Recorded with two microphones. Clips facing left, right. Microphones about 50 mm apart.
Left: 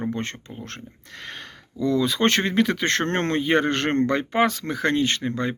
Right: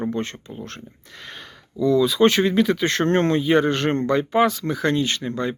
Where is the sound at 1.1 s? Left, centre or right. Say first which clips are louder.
Left 2 dB; left.